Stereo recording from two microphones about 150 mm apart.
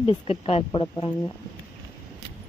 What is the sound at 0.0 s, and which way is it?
Speech, 40° left (ahead or behind).